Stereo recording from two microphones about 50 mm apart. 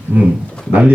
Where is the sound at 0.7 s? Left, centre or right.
Right.